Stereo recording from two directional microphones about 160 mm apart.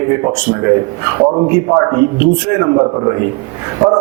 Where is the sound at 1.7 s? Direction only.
20° right (ahead or behind).